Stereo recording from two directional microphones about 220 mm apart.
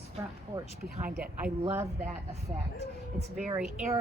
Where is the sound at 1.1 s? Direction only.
5° right (ahead or behind).